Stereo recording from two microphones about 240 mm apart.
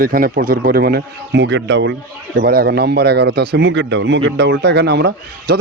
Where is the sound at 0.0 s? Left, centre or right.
Right.